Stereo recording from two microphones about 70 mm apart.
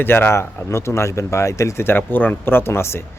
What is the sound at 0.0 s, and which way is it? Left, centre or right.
A man's voice, left.